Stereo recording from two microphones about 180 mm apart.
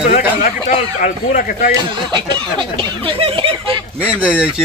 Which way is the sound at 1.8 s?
25° right (ahead or behind).